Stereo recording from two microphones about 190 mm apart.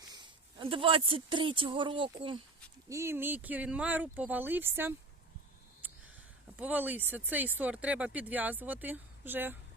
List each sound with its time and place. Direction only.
0.1 s speech: 25° right (ahead or behind)
2.9 s speech: 15° right (ahead or behind)
5.8 s a sound: 10° right (ahead or behind)
6.6 s speech: 10° right (ahead or behind)